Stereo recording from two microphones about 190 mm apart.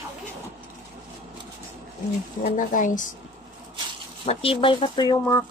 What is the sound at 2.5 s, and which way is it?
Speech, 45° left (ahead or behind).